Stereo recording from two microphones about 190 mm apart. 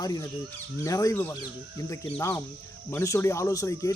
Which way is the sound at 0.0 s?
20° left (ahead or behind).